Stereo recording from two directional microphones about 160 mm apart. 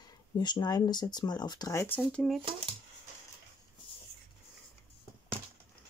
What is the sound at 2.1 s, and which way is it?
Speech, centre (ahead or behind).